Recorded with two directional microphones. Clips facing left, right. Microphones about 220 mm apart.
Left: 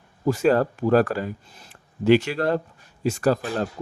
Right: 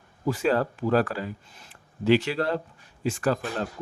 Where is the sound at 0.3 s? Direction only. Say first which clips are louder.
Left 5 dB; 45° left (ahead or behind).